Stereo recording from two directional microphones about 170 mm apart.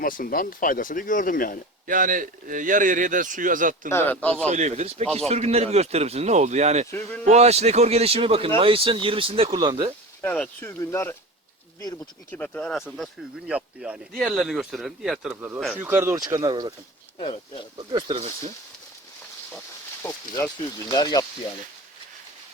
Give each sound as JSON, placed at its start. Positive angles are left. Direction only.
{"t": 0.0, "sound": "speech", "side_deg": 55}
{"t": 1.9, "sound": "a man's voice", "side_deg": -50}
{"t": 3.8, "sound": "speech", "side_deg": 15}
{"t": 4.4, "sound": "speech", "side_deg": -40}
{"t": 10.2, "sound": "speech", "side_deg": 5}
{"t": 12.3, "sound": "speech", "side_deg": 10}
{"t": 13.5, "sound": "speech", "side_deg": -5}
{"t": 17.2, "sound": "speech", "side_deg": 30}
{"t": 17.7, "sound": "speech", "side_deg": -30}
{"t": 19.5, "sound": "speech", "side_deg": 15}